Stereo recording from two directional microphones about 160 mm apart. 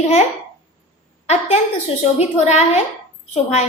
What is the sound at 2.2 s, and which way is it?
A woman's voice, 45° left (ahead or behind).